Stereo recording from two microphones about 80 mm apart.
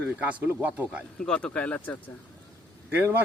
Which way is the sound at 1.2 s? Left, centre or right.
Centre.